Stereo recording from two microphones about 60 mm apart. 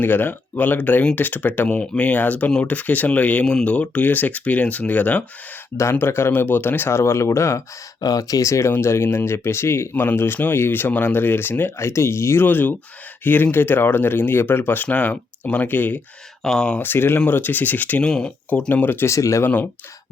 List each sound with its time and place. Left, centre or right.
0.0 s speech: left
1.6 s speech: centre
5.7 s speech: left
8.0 s speech: left
8.7 s speech: left
9.9 s speech: left
11.8 s speech: left
12.5 s speech: left
16.4 s speech: centre
16.8 s speech: left
19.0 s speech: left